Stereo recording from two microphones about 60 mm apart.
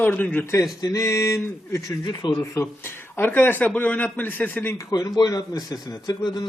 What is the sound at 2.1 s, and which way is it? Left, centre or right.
Speech, left.